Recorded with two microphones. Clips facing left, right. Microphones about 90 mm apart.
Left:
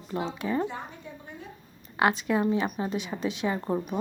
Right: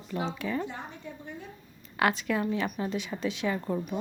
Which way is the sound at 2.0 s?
25° left (ahead or behind).